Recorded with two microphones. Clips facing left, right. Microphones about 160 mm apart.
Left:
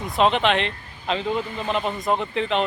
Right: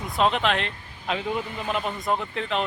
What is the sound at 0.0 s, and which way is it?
Speech, centre (ahead or behind).